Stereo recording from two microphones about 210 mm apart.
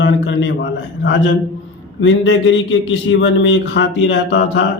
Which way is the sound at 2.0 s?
65° left (ahead or behind).